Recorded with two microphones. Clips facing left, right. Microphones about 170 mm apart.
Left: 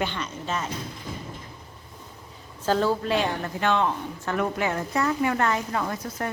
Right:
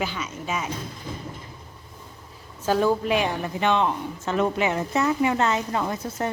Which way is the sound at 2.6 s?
10° right (ahead or behind).